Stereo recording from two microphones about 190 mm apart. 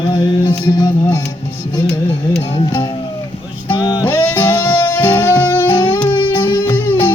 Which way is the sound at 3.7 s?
20° left (ahead or behind).